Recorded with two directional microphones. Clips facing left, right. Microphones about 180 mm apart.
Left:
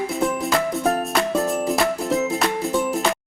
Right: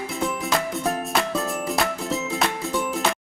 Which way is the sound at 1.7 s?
Centre (ahead or behind).